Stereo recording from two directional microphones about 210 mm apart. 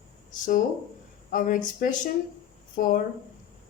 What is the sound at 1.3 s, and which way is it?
Speech, 40° left (ahead or behind).